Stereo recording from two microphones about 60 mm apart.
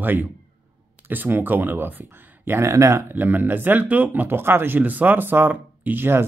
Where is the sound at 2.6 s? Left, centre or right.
Right.